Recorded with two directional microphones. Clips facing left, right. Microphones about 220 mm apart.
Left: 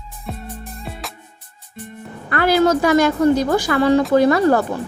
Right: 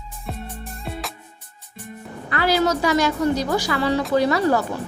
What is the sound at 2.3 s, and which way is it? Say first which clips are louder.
A woman's voice: left 5 dB; 50° left (ahead or behind).